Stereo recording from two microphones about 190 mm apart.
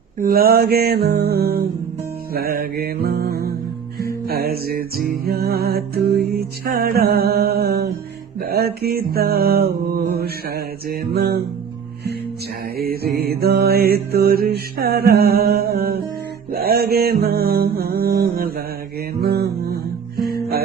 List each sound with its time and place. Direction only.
0.2 s music: 50° right (ahead or behind)
12.7 s music: 55° right (ahead or behind)
16.5 s mantra: 55° right (ahead or behind)